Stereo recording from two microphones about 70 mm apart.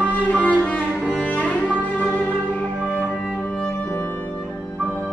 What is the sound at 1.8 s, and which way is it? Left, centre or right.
Music, left.